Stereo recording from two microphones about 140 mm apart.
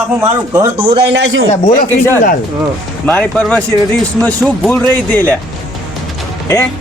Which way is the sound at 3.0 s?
10° left (ahead or behind).